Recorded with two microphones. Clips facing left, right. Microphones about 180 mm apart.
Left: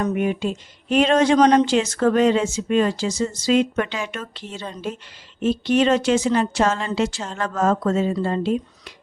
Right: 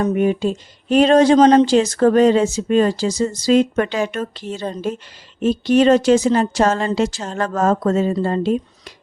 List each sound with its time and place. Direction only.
0.0 s speech: 35° right (ahead or behind)